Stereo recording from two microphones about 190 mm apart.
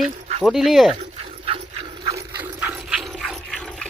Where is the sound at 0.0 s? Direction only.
35° right (ahead or behind).